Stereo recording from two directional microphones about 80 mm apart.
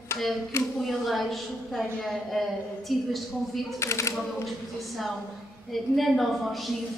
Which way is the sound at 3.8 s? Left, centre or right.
Left.